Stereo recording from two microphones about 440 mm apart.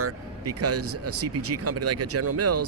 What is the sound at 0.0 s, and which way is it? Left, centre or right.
Speech, right.